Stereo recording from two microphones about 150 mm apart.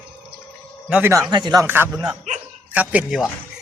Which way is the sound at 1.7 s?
15° right (ahead or behind).